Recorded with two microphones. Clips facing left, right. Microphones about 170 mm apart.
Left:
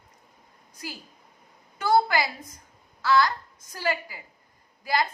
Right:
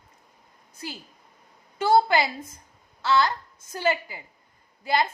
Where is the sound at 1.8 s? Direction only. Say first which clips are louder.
Right 2 dB; 25° right (ahead or behind).